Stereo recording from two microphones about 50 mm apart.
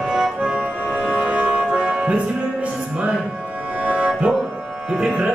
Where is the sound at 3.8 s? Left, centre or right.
Right.